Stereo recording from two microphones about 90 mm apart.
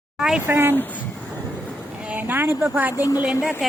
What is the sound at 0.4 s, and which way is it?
Speech, 25° right (ahead or behind).